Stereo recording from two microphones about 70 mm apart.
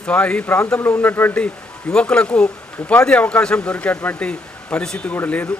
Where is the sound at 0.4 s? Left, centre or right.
Left.